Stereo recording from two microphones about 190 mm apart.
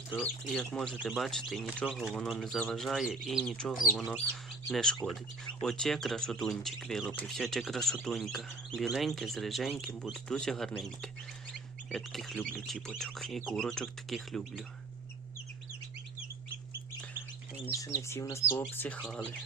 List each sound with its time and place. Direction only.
0.1 s speech: 5° left (ahead or behind)
17.7 s speech: 15° left (ahead or behind)